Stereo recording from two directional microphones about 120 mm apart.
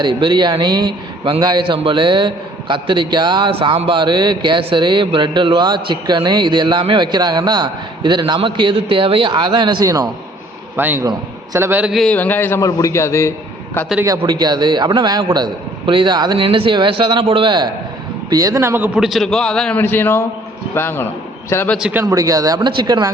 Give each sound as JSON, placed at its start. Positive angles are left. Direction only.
{"t": 0.0, "sound": "a man's voice", "side_deg": -40}
{"t": 9.8, "sound": "a man's voice", "side_deg": -30}
{"t": 10.8, "sound": "a man's voice", "side_deg": -15}
{"t": 11.9, "sound": "a man's voice", "side_deg": 0}
{"t": 12.1, "sound": "a man's voice", "side_deg": 15}
{"t": 14.2, "sound": "a man's voice", "side_deg": -40}
{"t": 18.3, "sound": "a man's voice", "side_deg": -30}
{"t": 18.9, "sound": "a man's voice", "side_deg": 0}
{"t": 21.8, "sound": "a man's voice", "side_deg": -10}
{"t": 22.0, "sound": "a man's voice", "side_deg": -30}